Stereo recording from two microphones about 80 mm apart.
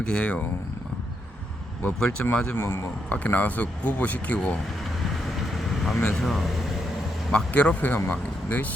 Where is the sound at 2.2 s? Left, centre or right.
Centre.